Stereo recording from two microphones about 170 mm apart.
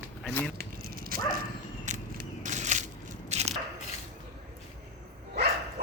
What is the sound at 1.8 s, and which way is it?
Crushing, 45° right (ahead or behind).